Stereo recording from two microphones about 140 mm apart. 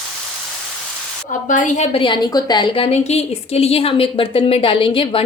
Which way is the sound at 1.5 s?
65° left (ahead or behind).